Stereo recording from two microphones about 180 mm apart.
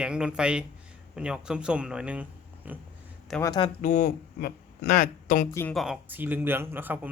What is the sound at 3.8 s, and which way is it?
Speech, 45° left (ahead or behind).